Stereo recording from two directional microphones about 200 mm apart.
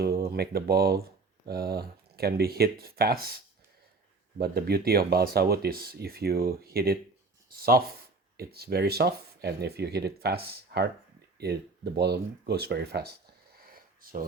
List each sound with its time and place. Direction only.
0.0 s speech: 50° right (ahead or behind)
4.4 s speech: 50° right (ahead or behind)
11.9 s speech: 55° right (ahead or behind)
13.6 s a sound: 45° right (ahead or behind)